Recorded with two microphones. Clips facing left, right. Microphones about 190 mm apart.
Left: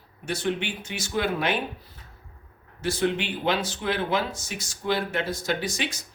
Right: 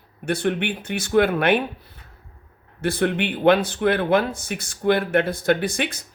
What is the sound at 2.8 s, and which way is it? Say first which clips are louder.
Speech: right 4 dB; 60° right (ahead or behind).